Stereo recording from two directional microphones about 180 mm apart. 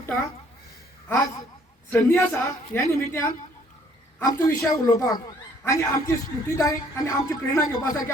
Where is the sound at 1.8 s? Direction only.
10° left (ahead or behind).